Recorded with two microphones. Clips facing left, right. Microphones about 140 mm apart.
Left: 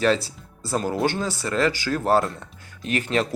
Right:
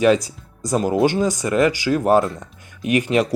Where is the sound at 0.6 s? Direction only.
15° right (ahead or behind).